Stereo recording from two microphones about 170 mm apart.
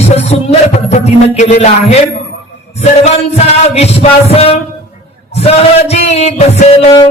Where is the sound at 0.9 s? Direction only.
40° left (ahead or behind).